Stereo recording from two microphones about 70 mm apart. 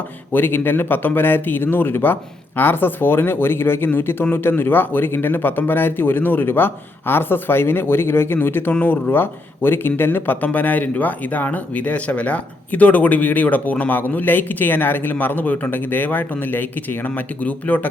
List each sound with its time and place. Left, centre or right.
0.3 s speech: left